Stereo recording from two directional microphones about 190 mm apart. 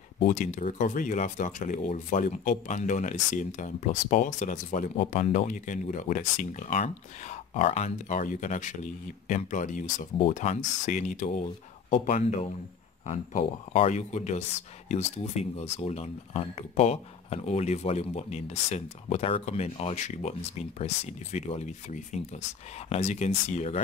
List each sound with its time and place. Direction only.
0.3 s speech: 40° left (ahead or behind)